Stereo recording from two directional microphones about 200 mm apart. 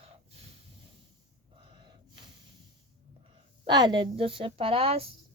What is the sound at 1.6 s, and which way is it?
Snort, 25° right (ahead or behind).